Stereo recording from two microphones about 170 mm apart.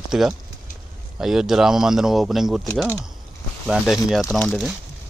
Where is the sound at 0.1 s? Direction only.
5° right (ahead or behind).